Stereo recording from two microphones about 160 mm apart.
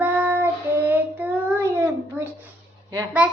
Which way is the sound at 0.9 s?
10° right (ahead or behind).